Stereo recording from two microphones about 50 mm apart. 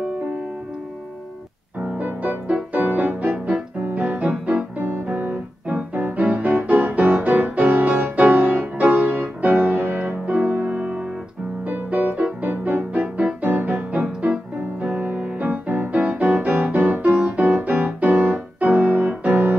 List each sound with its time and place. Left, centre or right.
2.0 s music: right
8.9 s keyboard: right
9.4 s music: right
13.5 s music: right